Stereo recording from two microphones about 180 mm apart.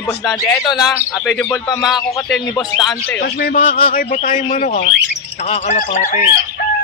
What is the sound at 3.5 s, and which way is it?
A man's voice, 50° left (ahead or behind).